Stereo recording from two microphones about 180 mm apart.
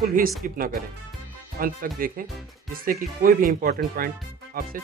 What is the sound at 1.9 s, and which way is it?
Speech, 50° right (ahead or behind).